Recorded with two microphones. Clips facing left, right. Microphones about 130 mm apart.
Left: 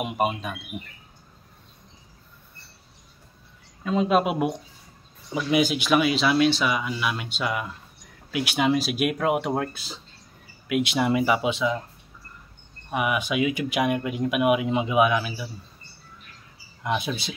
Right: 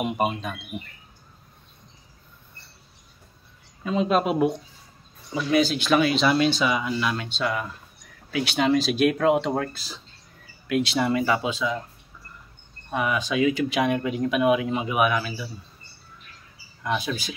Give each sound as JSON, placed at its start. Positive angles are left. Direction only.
{"t": 0.0, "sound": "speech", "side_deg": 5}
{"t": 3.8, "sound": "speech", "side_deg": 0}
{"t": 12.9, "sound": "speech", "side_deg": 15}
{"t": 16.8, "sound": "speech", "side_deg": 20}